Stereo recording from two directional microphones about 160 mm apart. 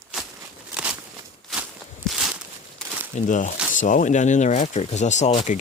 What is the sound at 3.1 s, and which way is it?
Speech, 50° left (ahead or behind).